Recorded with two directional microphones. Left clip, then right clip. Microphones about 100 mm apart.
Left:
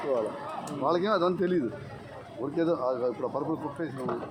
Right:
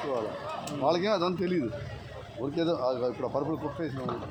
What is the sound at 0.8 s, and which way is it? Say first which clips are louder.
Speech: left 1 dB; 45° right (ahead or behind).